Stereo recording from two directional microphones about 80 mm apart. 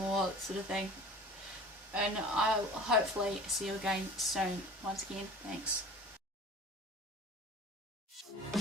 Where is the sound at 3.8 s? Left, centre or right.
Centre.